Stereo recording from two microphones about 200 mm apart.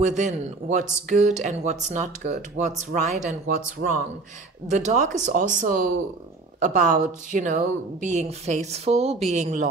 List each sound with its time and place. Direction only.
0.0 s speech: 35° right (ahead or behind)